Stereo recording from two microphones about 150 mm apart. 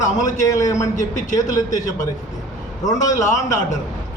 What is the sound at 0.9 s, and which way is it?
Speech, 55° left (ahead or behind).